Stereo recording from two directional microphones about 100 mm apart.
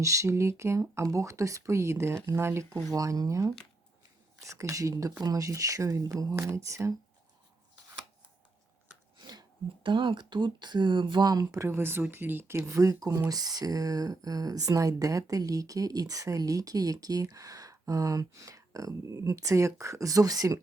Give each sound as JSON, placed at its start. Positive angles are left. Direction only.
{"t": 0.0, "sound": "speech", "side_deg": -30}
{"t": 9.1, "sound": "a sound", "side_deg": -45}
{"t": 9.8, "sound": "speech", "side_deg": -55}